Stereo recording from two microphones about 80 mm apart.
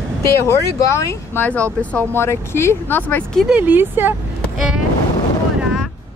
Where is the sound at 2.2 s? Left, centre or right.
Left.